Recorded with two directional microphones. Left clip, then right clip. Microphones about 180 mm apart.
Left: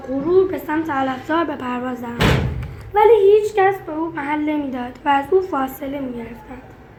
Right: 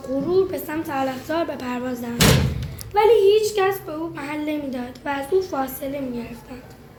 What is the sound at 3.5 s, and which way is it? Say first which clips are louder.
A woman's voice: left 5 dB; 25° left (ahead or behind).